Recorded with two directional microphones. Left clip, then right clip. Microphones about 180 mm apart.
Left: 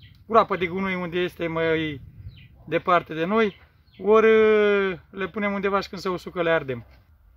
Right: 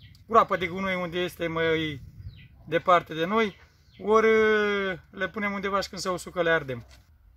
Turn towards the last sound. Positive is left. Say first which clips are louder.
# left 2 dB
turn(degrees=45)  # may be behind; listen again after turning